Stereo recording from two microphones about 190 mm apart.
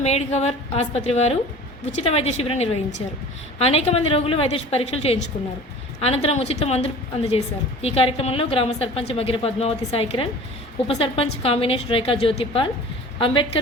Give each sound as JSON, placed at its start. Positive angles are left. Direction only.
{"t": 0.0, "sound": "a woman's voice", "side_deg": 35}